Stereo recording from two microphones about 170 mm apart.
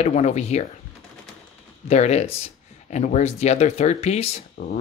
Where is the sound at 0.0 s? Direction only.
40° left (ahead or behind).